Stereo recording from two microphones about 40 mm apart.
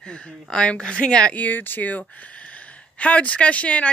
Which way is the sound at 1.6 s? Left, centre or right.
Left.